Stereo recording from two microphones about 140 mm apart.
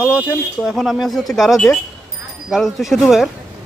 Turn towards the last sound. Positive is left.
turn(degrees=0)  # may be behind; listen again after turning